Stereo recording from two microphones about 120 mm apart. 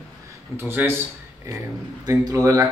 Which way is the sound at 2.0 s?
30° right (ahead or behind).